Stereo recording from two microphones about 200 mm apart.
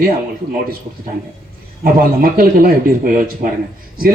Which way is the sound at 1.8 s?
45° right (ahead or behind).